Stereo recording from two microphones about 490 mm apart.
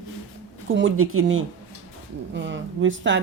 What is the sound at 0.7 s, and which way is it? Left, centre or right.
Speech, right.